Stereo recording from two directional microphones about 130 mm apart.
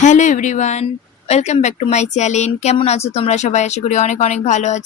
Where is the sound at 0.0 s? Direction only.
70° left (ahead or behind).